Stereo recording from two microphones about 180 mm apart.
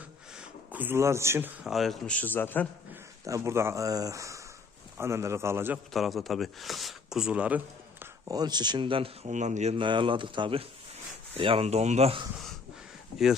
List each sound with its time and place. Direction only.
0.3 s speech: 10° right (ahead or behind)
1.7 s a man's voice: centre (ahead or behind)
2.9 s a man's voice: 15° right (ahead or behind)
5.9 s speech: centre (ahead or behind); by 9.3 s 30° right (ahead or behind)
9.3 s speech: 40° right (ahead or behind)